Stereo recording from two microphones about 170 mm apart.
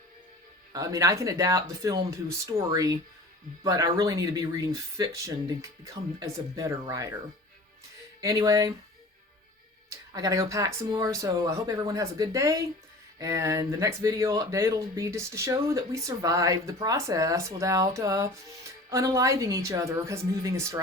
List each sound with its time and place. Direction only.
0.7 s speech: 20° right (ahead or behind)
8.2 s speech: 20° right (ahead or behind)
10.1 s speech: 20° right (ahead or behind)